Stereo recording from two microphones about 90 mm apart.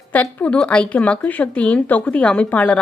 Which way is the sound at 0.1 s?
15° left (ahead or behind).